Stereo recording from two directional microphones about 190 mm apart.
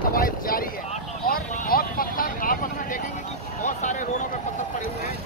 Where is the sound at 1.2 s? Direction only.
50° left (ahead or behind).